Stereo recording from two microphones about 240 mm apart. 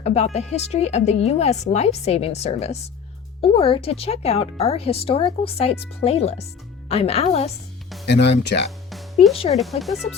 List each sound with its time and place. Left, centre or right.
0.0 s a woman's voice: left
8.0 s speech: left
9.6 s speech: centre